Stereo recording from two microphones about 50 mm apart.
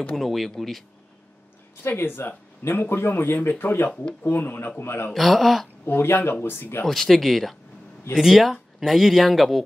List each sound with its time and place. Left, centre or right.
0.1 s speech: centre
1.9 s speech: left
3.3 s speech: left
5.1 s speech: centre
5.9 s speech: left
6.9 s speech: centre